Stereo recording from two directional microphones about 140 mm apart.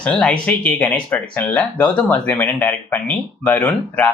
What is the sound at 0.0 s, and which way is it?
Speech, 10° left (ahead or behind).